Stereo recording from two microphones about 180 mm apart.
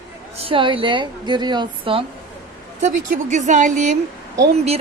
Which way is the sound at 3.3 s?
40° right (ahead or behind).